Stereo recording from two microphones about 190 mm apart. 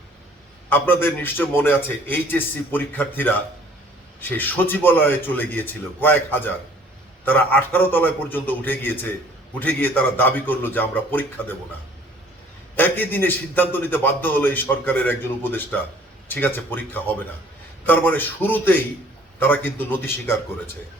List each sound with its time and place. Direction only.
0.7 s a man's voice: 10° left (ahead or behind)
12.7 s a man's voice: 10° left (ahead or behind)